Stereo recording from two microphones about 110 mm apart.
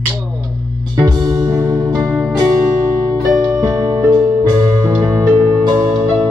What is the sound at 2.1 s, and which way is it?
Music, 5° right (ahead or behind).